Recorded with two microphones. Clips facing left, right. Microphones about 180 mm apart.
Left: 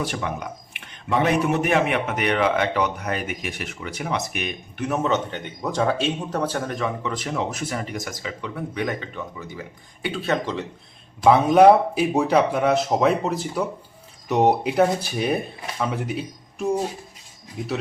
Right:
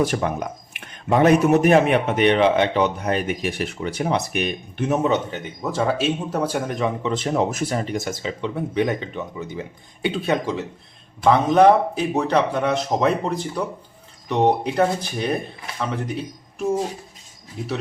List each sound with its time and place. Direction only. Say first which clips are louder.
0.0 s speech: right 6 dB; 45° right (ahead or behind)
4.9 s speech: right 2 dB; 15° right (ahead or behind)
7.3 s speech: right 6 dB; 35° right (ahead or behind); by 10.7 s 10° right (ahead or behind)
11.2 s speech: left 1 dB; 10° left (ahead or behind)